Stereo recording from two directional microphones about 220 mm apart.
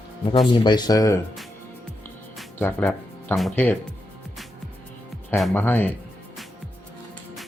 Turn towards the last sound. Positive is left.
turn(degrees=10)  # may be behind; listen again after turning